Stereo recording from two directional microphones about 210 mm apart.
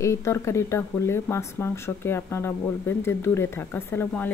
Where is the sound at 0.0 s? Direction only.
15° left (ahead or behind).